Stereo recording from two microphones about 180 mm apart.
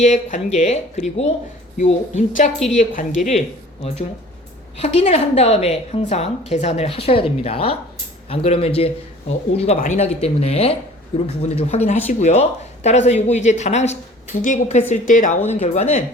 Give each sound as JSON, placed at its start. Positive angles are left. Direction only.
{"t": 0.0, "sound": "a woman's voice", "side_deg": 40}
{"t": 4.8, "sound": "a woman's voice", "side_deg": 35}
{"t": 9.7, "sound": "a woman's voice", "side_deg": 45}